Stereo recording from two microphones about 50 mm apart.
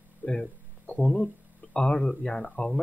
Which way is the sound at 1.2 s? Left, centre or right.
Centre.